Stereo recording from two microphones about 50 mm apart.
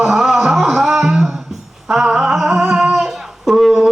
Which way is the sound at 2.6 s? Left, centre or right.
Centre.